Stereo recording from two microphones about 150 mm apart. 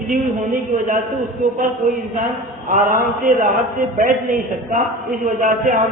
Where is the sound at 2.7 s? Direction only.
60° right (ahead or behind).